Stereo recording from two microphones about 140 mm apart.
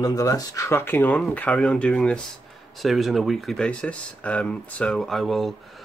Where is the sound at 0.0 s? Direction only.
25° left (ahead or behind).